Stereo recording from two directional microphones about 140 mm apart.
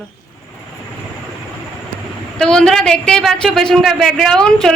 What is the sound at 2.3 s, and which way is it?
A woman's voice, 5° left (ahead or behind).